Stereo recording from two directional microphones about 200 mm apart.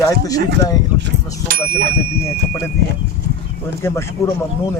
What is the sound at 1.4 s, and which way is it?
Speech, 45° right (ahead or behind).